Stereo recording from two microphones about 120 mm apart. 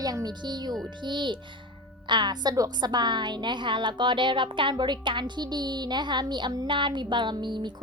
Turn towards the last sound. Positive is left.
turn(degrees=-40)  # may be behind; listen again after turning